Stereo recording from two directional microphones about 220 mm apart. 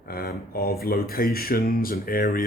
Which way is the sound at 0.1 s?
45° left (ahead or behind).